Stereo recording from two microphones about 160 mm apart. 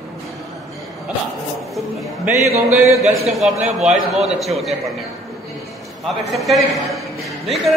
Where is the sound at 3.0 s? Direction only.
45° right (ahead or behind).